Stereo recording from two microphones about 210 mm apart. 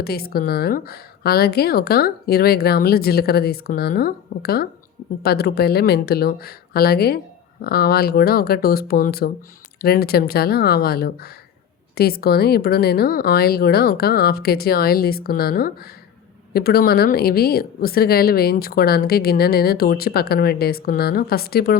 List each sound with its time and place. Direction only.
0.0 s a woman's voice: 45° left (ahead or behind)